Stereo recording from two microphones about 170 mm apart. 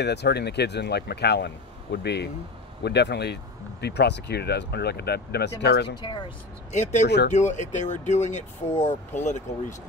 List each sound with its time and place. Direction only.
0.0 s speech: 80° left
5.9 s speech: 25° left (ahead or behind)
6.7 s speech: 45° left (ahead or behind)